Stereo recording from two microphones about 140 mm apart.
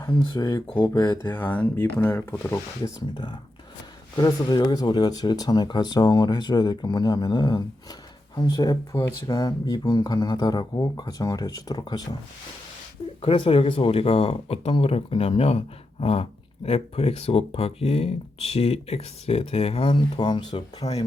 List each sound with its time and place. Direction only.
0.0 s speech: 25° left (ahead or behind)
1.2 s speech: 15° left (ahead or behind)
4.2 s speech: 30° left (ahead or behind)
13.2 s speech: 40° left (ahead or behind)